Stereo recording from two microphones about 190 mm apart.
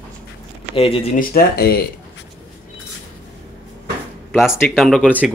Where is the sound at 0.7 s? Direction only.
30° left (ahead or behind).